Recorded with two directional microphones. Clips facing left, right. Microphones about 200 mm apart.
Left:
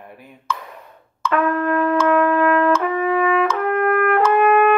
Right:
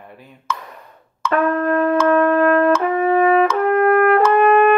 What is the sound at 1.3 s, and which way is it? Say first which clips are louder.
Wind instrument: right 2 dB; 40° right (ahead or behind).